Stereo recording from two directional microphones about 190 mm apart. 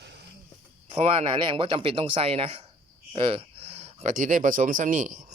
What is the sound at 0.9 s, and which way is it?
Speech, 30° right (ahead or behind).